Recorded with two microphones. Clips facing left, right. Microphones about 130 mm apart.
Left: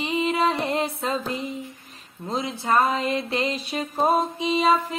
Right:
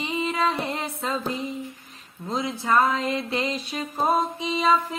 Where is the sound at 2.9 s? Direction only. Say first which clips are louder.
Left 1 dB; 55° left (ahead or behind).